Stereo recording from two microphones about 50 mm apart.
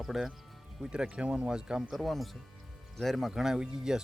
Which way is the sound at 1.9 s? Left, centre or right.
Centre.